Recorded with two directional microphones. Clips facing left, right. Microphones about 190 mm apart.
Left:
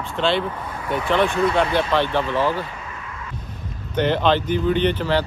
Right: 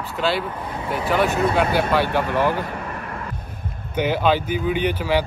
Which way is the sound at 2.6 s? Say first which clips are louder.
Right 5 dB; 60° right (ahead or behind).